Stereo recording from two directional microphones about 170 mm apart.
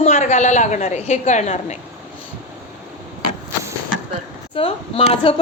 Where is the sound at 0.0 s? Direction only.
40° left (ahead or behind).